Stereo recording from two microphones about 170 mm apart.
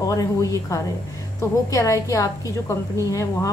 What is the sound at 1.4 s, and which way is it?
A woman's voice, 20° left (ahead or behind).